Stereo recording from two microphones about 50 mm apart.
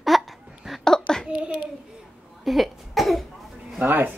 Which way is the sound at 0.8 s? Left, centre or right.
Centre.